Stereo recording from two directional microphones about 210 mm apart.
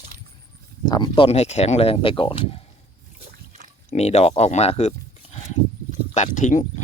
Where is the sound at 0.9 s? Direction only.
20° left (ahead or behind).